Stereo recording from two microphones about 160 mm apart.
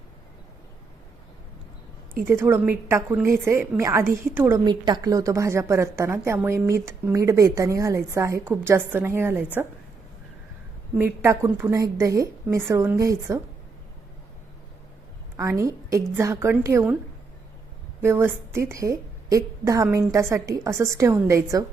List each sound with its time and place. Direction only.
2.3 s a woman's voice: 15° right (ahead or behind)
4.6 s a woman's voice: 25° right (ahead or behind)
10.9 s a woman's voice: 15° right (ahead or behind)
15.4 s a woman's voice: 20° right (ahead or behind)
18.0 s a woman's voice: 15° right (ahead or behind)